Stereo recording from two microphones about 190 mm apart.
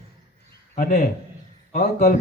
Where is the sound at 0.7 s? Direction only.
40° left (ahead or behind).